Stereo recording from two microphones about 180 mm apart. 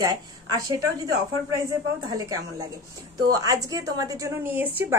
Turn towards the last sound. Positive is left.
turn(degrees=-10)  # may be behind; listen again after turning